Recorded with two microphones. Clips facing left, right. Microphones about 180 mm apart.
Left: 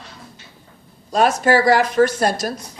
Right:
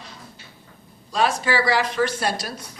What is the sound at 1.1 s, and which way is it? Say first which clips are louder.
A woman's voice: left 6 dB; 45° left (ahead or behind).